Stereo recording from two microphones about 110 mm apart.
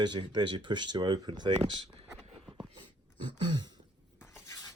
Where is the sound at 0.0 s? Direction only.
45° right (ahead or behind).